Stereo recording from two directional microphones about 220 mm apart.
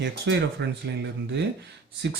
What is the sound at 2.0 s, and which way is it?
Speech, 50° right (ahead or behind).